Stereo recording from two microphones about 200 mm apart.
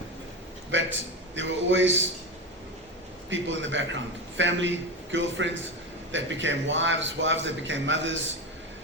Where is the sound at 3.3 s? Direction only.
70° right (ahead or behind).